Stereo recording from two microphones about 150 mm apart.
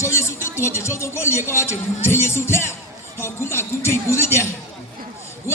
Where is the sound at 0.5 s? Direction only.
20° left (ahead or behind).